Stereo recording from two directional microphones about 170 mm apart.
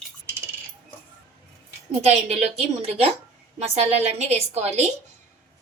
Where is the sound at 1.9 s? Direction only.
40° right (ahead or behind).